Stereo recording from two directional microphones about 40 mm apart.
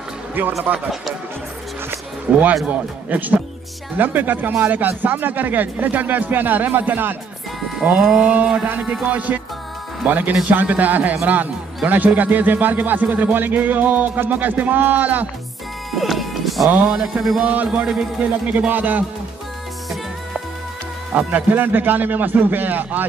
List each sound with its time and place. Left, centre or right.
0.4 s a man's voice: right
2.3 s mantra: right
2.6 s a man's voice: right
3.9 s a man's voice: right
8.2 s a man's voice: right
10.5 s a man's voice: right
15.9 s music: centre
16.9 s mantra: centre
17.5 s a man's voice: right
18.7 s a man's voice: right
21.1 s a man's voice: right
21.5 s a man's voice: right